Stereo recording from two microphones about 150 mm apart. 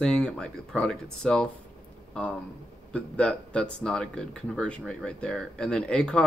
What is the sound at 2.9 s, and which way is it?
Speech, 10° left (ahead or behind).